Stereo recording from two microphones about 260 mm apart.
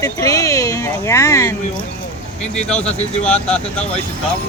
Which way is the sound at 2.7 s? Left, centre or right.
Left.